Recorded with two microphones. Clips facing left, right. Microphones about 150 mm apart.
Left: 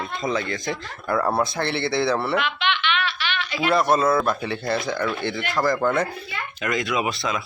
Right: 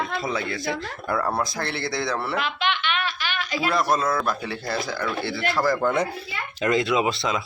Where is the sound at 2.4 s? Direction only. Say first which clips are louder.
Left 1 dB; 40° right (ahead or behind).